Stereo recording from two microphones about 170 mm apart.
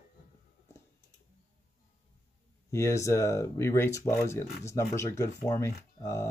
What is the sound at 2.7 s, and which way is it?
Speech, 15° left (ahead or behind).